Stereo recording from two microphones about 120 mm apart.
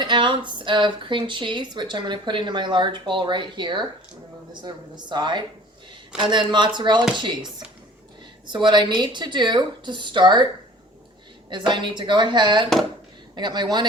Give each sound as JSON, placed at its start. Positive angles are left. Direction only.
{"t": 0.0, "sound": "speech", "side_deg": -40}
{"t": 8.4, "sound": "speech", "side_deg": -40}